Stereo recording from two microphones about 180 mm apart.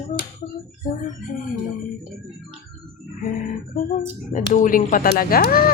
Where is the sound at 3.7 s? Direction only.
45° left (ahead or behind).